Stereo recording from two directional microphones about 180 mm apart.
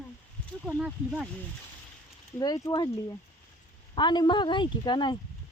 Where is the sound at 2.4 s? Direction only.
25° left (ahead or behind).